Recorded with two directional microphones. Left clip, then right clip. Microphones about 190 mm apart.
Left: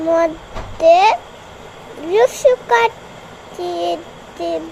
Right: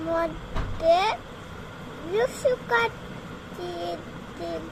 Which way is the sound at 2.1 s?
15° left (ahead or behind).